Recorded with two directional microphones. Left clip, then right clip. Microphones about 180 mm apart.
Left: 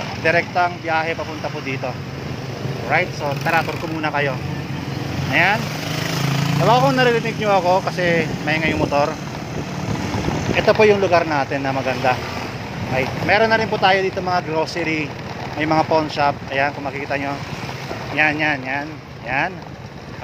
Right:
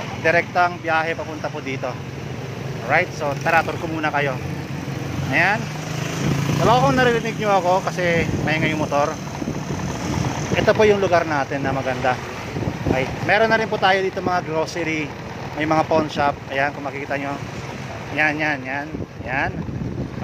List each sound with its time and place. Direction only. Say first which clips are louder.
0.2 s speech: even; 10° right (ahead or behind)
2.9 s speech: even; 20° right (ahead or behind)
5.3 s speech: left 2 dB; centre (ahead or behind)
6.6 s speech: left 1 dB; 5° right (ahead or behind)
10.5 s speech: left 2 dB; 5° right (ahead or behind)